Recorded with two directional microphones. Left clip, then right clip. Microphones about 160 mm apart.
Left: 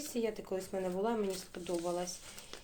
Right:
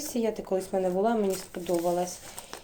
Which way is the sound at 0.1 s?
10° right (ahead or behind).